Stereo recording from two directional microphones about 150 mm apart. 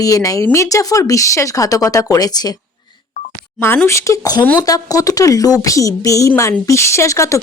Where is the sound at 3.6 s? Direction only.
15° left (ahead or behind).